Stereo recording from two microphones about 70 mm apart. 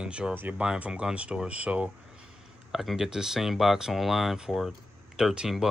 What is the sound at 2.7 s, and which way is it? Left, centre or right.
Speech, centre.